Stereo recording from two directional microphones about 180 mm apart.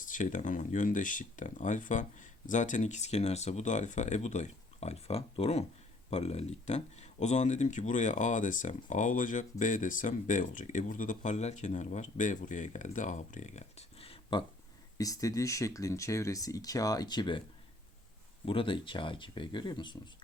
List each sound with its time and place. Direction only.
0.0 s speech: 45° left (ahead or behind); by 14.4 s 30° left (ahead or behind)
14.9 s speech: 20° left (ahead or behind)
18.4 s speech: 30° left (ahead or behind)